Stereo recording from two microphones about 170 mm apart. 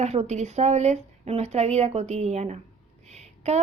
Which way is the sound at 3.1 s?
40° right (ahead or behind).